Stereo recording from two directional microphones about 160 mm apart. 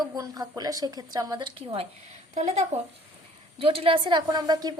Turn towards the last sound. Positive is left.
turn(degrees=-25)  # may be behind; listen again after turning